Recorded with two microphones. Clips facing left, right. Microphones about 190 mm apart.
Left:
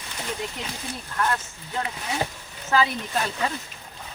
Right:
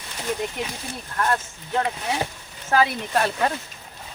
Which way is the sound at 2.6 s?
60° right (ahead or behind).